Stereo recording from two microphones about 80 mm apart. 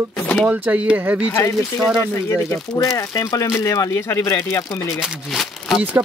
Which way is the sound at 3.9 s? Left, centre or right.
Left.